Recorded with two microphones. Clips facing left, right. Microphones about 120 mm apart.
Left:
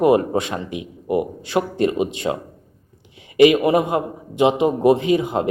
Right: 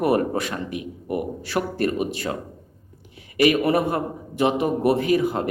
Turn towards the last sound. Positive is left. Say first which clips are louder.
# left 2 dB
turn(degrees=20)  # may be behind; listen again after turning